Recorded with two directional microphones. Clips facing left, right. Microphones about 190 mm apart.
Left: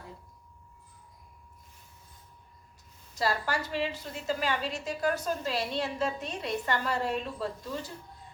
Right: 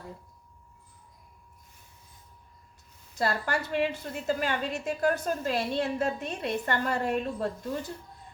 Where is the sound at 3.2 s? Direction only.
55° right (ahead or behind).